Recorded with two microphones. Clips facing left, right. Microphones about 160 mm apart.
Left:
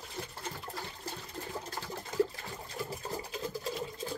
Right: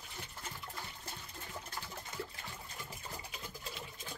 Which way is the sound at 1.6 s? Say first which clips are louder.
Left 6 dB; 35° left (ahead or behind).